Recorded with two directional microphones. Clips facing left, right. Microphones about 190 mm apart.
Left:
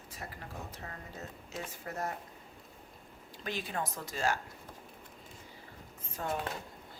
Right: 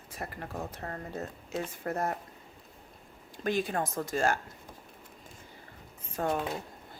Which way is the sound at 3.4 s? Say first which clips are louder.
Right 7 dB; 50° right (ahead or behind).